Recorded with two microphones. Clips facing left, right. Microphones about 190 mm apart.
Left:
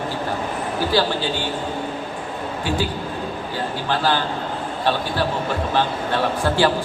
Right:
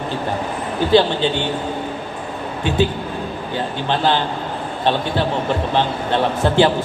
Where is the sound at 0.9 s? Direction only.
20° right (ahead or behind).